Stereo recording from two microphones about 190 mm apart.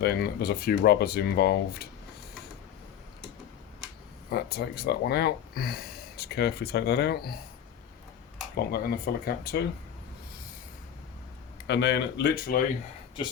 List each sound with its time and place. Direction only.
0.0 s speech: 55° left (ahead or behind)
4.3 s speech: 60° left (ahead or behind)
8.5 s speech: 50° left (ahead or behind)
11.7 s speech: 65° left (ahead or behind)